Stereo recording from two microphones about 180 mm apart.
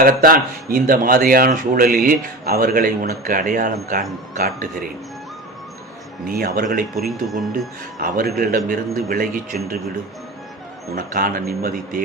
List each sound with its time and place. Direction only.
0.0 s speech: 55° right (ahead or behind)
6.2 s speech: 55° right (ahead or behind)
6.9 s speech: centre (ahead or behind)
7.9 s speech: 50° right (ahead or behind)
10.9 s speech: 55° right (ahead or behind)